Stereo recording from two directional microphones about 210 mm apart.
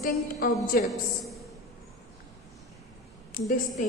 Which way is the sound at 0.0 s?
45° left (ahead or behind).